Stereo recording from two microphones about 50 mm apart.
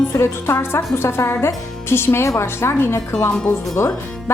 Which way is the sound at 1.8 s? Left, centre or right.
Left.